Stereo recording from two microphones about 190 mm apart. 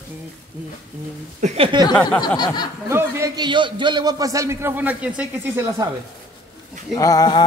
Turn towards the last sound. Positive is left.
turn(degrees=20)  # may be behind; listen again after turning